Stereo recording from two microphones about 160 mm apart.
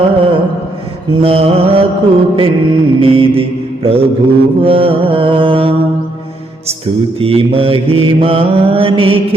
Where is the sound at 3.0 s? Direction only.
35° right (ahead or behind).